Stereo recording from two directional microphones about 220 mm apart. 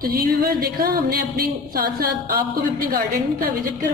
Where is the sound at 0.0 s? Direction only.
40° right (ahead or behind).